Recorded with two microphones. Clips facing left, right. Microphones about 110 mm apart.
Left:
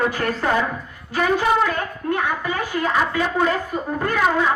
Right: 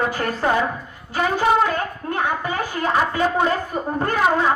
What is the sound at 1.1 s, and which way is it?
A woman's voice, 30° right (ahead or behind).